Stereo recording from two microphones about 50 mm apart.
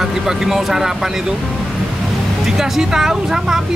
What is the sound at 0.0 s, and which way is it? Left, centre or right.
Speech, centre.